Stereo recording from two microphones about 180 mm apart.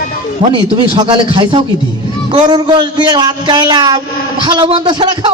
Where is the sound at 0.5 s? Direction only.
25° right (ahead or behind).